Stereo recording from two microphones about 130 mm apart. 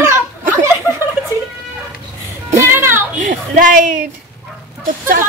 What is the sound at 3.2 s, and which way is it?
Speech, 85° right.